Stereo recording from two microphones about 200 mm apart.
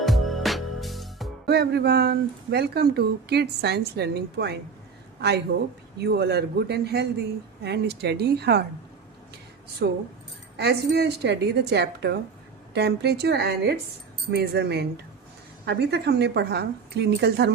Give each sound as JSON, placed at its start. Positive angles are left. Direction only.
{"t": 0.0, "sound": "music", "side_deg": 0}
{"t": 1.5, "sound": "speech", "side_deg": -55}
{"t": 6.0, "sound": "speech", "side_deg": -55}
{"t": 9.8, "sound": "speech", "side_deg": -55}